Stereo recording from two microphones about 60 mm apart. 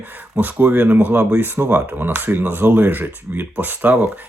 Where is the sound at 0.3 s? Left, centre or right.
Right.